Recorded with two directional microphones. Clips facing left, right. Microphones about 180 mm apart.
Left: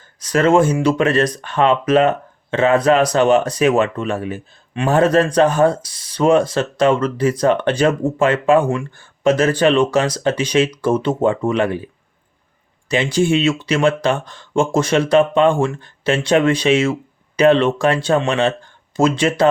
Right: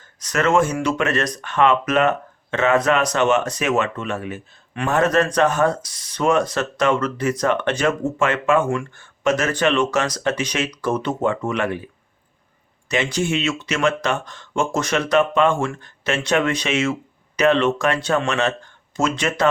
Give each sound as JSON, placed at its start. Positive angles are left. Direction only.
{"t": 0.2, "sound": "speech", "side_deg": 30}
{"t": 12.9, "sound": "speech", "side_deg": 30}